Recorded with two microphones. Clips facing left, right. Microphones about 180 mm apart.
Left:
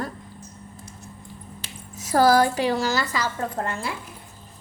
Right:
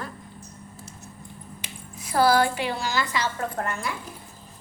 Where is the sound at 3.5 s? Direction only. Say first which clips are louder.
Left 1 dB; 30° left (ahead or behind).